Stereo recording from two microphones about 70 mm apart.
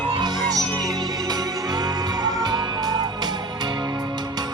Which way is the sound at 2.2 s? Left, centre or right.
Right.